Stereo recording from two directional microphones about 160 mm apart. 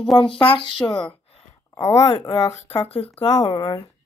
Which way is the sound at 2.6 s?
40° left (ahead or behind).